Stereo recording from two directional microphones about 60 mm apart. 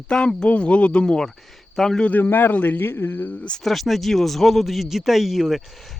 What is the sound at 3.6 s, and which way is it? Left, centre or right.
Speech, centre.